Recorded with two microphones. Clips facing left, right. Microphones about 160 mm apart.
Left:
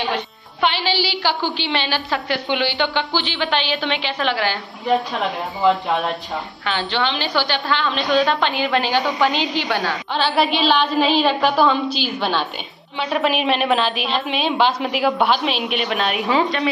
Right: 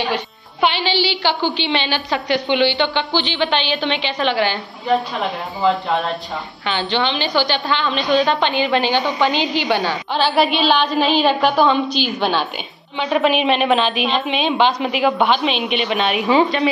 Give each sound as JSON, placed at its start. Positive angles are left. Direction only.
{"t": 0.6, "sound": "music", "side_deg": 0}
{"t": 1.0, "sound": "a woman's voice", "side_deg": 5}